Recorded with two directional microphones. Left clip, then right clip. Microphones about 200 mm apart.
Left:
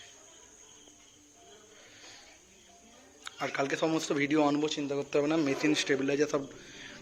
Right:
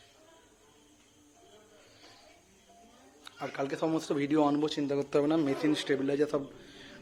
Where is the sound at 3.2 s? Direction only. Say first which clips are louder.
Left 3 dB; centre (ahead or behind).